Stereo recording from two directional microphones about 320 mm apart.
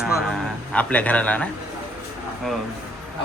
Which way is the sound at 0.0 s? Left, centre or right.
Centre.